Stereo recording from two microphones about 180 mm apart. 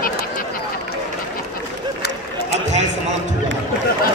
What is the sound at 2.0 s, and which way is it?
Run, 65° left (ahead or behind).